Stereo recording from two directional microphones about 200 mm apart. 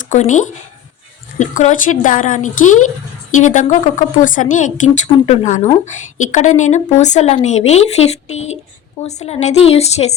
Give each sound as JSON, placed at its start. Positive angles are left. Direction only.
{"t": 0.0, "sound": "a woman's voice", "side_deg": 35}